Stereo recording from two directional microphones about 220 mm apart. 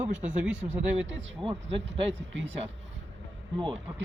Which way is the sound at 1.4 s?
25° right (ahead or behind).